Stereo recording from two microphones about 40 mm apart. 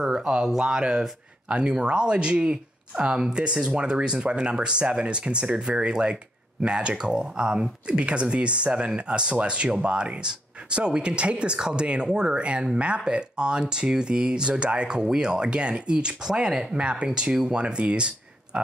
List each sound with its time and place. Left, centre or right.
0.0 s speech: centre